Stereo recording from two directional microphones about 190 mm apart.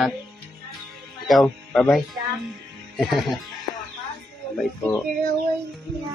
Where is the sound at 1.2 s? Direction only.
Centre (ahead or behind).